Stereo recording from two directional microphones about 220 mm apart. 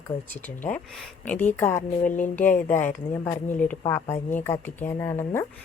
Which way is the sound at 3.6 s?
10° left (ahead or behind).